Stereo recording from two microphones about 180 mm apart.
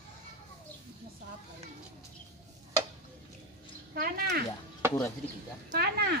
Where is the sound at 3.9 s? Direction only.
55° right (ahead or behind).